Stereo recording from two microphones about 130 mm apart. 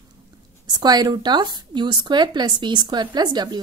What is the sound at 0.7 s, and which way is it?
A woman's voice, 30° right (ahead or behind).